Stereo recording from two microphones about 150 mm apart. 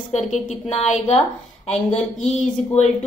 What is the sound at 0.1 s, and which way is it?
Speech, 50° left (ahead or behind).